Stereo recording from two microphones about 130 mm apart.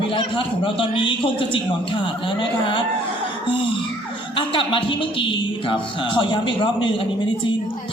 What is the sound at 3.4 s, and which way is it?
A man's voice, 40° left (ahead or behind).